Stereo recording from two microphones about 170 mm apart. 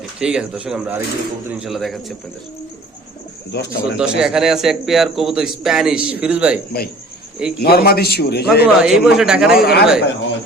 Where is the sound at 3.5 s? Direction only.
75° left (ahead or behind).